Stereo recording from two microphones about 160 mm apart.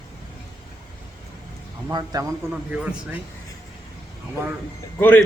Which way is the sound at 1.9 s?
20° right (ahead or behind).